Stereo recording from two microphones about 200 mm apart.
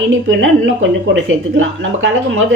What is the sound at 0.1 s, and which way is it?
Speech, 65° right (ahead or behind).